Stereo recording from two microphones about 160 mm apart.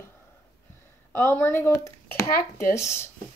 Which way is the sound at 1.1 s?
15° left (ahead or behind).